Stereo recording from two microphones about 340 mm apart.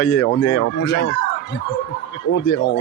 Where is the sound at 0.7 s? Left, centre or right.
Left.